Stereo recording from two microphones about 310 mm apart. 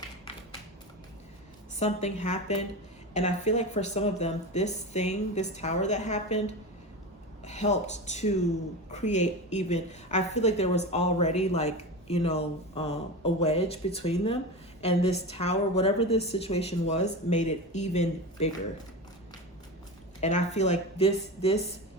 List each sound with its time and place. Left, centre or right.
1.8 s a woman's voice: left
20.2 s a woman's voice: left